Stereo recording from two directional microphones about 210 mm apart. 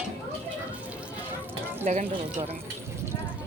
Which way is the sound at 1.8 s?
30° right (ahead or behind).